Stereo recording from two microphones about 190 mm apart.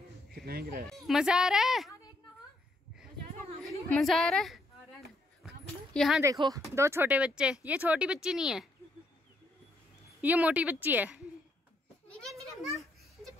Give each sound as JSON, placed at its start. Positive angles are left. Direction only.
{"t": 0.5, "sound": "speech", "side_deg": -55}
{"t": 0.9, "sound": "a woman's voice", "side_deg": 0}
{"t": 1.9, "sound": "a sound", "side_deg": 20}
{"t": 3.6, "sound": "a woman's voice", "side_deg": 0}
{"t": 5.9, "sound": "a woman's voice", "side_deg": 0}
{"t": 6.2, "sound": "speech", "side_deg": -20}
{"t": 10.2, "sound": "speech", "side_deg": -10}